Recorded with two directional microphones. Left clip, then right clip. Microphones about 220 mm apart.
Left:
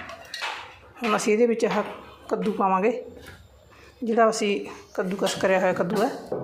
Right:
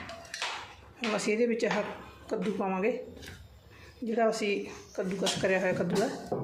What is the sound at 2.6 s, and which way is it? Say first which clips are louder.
Speech: left 10 dB; 10° left (ahead or behind).